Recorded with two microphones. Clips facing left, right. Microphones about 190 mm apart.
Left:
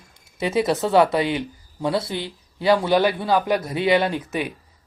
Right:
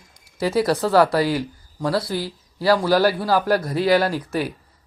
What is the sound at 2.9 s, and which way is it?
Speech, 5° right (ahead or behind).